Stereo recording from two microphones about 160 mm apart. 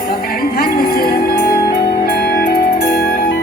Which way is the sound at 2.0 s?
85° left.